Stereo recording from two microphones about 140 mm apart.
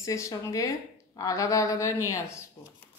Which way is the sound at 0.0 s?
25° left (ahead or behind).